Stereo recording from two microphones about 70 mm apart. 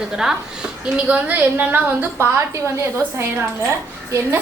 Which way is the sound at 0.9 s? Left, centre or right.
Centre.